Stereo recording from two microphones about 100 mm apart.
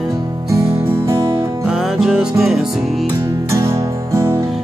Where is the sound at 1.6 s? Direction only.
5° right (ahead or behind).